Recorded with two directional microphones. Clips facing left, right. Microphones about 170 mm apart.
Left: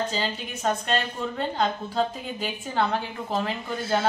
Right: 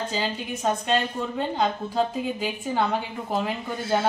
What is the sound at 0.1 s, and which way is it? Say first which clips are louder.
A woman's voice: right 2 dB; 10° right (ahead or behind).